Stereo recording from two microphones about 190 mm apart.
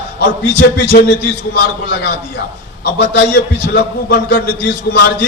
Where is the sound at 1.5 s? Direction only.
65° left (ahead or behind).